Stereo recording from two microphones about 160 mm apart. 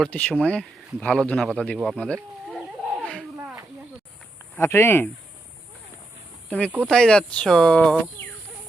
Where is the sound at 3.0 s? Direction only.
5° left (ahead or behind).